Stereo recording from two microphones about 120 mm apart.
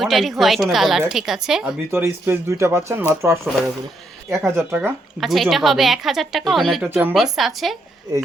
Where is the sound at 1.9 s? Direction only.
20° right (ahead or behind).